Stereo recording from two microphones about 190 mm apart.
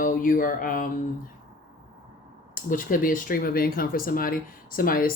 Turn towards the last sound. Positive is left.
turn(degrees=50)  # may be behind; listen again after turning